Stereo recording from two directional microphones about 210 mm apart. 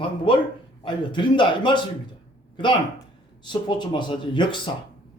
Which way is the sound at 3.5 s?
20° left (ahead or behind).